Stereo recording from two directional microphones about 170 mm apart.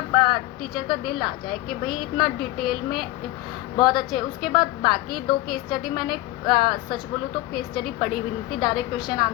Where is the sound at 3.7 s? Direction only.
25° left (ahead or behind).